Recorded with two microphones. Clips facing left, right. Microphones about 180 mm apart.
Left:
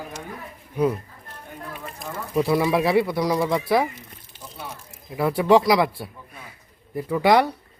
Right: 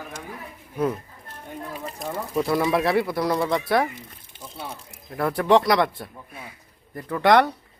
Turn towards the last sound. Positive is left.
turn(degrees=5)  # may be behind; listen again after turning